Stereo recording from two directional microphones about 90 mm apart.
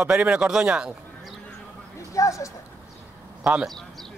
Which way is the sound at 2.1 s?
35° left (ahead or behind).